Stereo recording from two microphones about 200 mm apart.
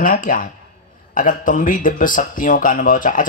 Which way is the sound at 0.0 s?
45° left (ahead or behind).